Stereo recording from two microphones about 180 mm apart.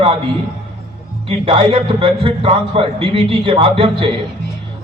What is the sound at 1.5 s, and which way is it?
A man's voice, 30° right (ahead or behind).